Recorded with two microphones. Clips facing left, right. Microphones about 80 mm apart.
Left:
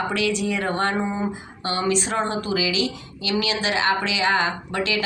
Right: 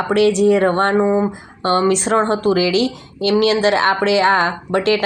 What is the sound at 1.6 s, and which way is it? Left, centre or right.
A woman's voice, right.